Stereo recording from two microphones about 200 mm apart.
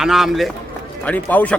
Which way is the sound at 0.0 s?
Centre (ahead or behind).